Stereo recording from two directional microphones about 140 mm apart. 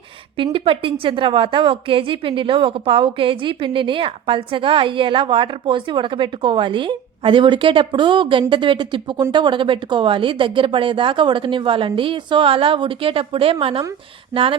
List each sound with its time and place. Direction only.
0.5 s a woman's voice: 40° right (ahead or behind)